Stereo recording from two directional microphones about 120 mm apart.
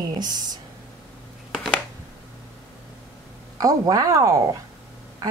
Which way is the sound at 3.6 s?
30° right (ahead or behind).